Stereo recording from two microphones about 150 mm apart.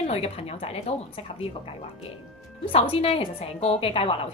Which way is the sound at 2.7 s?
40° left (ahead or behind).